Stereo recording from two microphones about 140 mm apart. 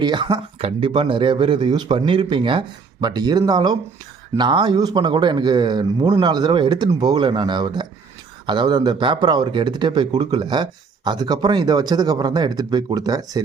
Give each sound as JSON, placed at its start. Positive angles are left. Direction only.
{"t": 0.0, "sound": "speech", "side_deg": -30}